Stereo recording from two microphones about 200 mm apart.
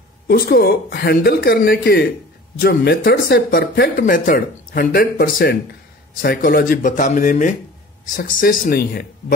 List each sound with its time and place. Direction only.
0.3 s speech: 50° left (ahead or behind)